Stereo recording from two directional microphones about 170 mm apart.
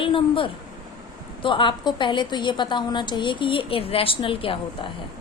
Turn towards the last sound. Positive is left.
turn(degrees=30)  # may be behind; listen again after turning